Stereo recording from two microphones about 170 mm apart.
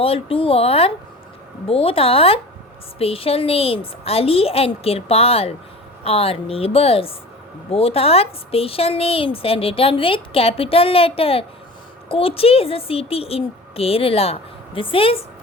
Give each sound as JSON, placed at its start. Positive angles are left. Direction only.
{"t": 0.0, "sound": "a woman's voice", "side_deg": 35}